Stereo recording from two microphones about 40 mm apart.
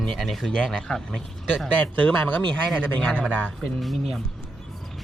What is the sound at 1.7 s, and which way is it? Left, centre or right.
Speech, left.